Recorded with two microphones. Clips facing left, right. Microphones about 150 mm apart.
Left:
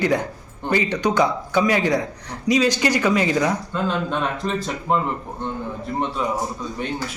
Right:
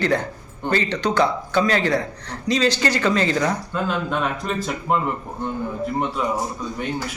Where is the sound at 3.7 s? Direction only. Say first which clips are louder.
Even; 5° right (ahead or behind).